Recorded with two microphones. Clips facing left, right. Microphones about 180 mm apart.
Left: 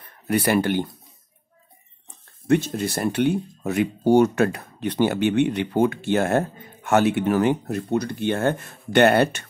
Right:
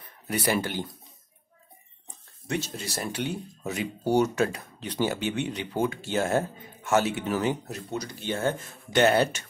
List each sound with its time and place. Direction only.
0.3 s speech: 60° left (ahead or behind)
2.4 s speech: 55° left (ahead or behind)